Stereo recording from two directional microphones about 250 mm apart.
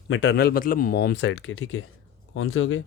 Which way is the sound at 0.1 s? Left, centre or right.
Left.